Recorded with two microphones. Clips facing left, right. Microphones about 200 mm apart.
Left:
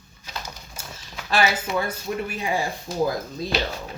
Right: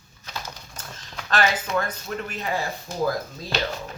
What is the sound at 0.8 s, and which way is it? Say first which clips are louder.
Speech: even; 10° left (ahead or behind).